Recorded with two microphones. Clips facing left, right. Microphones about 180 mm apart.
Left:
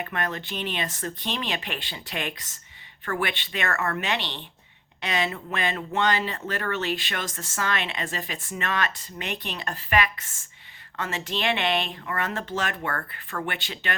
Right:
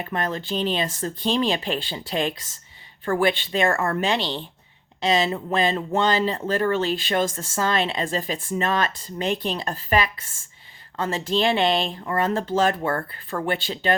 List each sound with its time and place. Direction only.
0.0 s speech: 35° right (ahead or behind)